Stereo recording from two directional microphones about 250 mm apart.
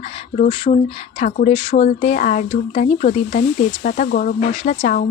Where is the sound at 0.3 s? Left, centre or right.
Left.